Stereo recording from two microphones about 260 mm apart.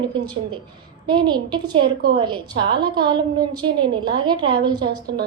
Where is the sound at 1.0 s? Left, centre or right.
Centre.